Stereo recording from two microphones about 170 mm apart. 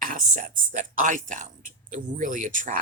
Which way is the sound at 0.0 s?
50° right (ahead or behind).